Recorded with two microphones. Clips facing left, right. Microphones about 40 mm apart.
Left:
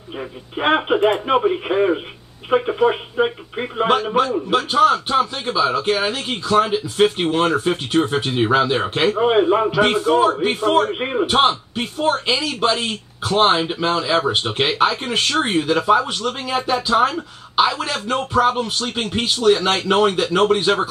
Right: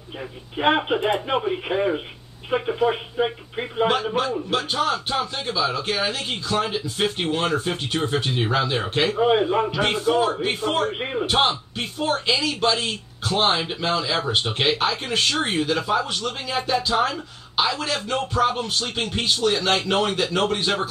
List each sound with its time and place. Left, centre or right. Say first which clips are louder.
0.2 s a man's voice: left 1 dB; centre
11.2 s a man's voice: left 4 dB; centre